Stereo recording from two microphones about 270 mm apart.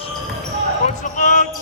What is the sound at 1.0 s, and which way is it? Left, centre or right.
Speech, left.